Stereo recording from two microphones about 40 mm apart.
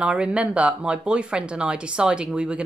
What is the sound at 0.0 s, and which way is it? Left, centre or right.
A woman's voice, right.